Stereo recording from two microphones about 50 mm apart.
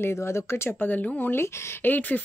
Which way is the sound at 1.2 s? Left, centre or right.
Left.